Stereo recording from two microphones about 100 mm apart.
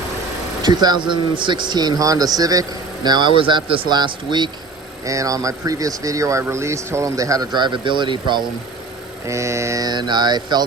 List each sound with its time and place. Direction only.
0.6 s speech: 45° right (ahead or behind)
5.0 s speech: 35° right (ahead or behind); by 8.4 s 50° right (ahead or behind)
9.2 s speech: 30° right (ahead or behind)